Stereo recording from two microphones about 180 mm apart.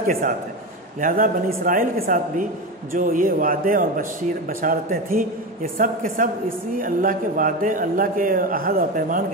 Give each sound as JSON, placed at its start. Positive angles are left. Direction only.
{"t": 0.0, "sound": "a man's voice", "side_deg": -50}